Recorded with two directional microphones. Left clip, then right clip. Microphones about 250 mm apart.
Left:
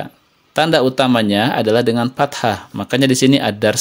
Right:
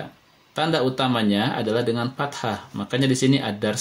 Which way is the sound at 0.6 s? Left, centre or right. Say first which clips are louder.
Left 8 dB; left.